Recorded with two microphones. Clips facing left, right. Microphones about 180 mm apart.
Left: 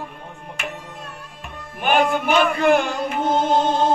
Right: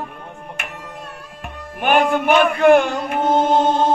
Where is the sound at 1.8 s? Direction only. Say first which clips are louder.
Right 2 dB; 55° right (ahead or behind).